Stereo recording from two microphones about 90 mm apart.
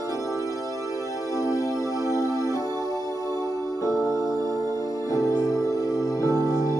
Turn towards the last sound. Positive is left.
turn(degrees=40)  # may be behind; listen again after turning